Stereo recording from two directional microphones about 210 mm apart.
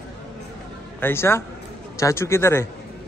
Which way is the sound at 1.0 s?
10° left (ahead or behind).